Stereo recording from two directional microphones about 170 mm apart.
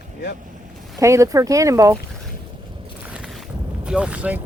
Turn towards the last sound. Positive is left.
turn(degrees=-10)  # may be behind; listen again after turning